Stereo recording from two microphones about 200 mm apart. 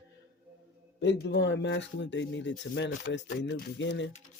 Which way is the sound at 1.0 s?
60° left (ahead or behind).